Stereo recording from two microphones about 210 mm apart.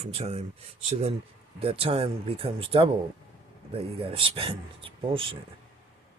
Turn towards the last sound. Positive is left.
turn(degrees=-25)  # may be behind; listen again after turning